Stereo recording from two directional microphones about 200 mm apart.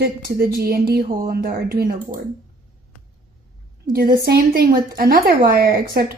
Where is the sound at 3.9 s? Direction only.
50° right (ahead or behind).